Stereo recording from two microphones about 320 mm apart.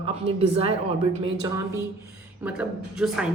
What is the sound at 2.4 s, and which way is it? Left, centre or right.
Speech, centre.